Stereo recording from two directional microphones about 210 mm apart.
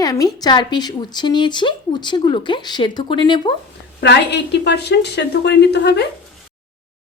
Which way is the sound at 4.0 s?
55° left (ahead or behind).